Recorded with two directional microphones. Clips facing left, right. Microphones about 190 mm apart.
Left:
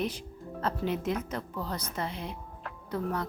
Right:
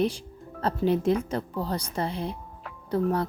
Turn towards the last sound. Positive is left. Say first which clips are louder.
# right 7 dB
turn(degrees=-30)  # may be behind; listen again after turning